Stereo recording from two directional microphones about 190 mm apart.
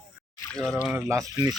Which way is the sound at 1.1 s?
15° right (ahead or behind).